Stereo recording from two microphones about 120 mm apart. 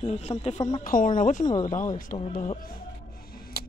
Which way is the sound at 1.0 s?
90° left.